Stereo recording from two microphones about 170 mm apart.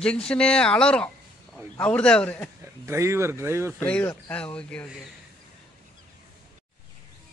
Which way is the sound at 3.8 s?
10° left (ahead or behind).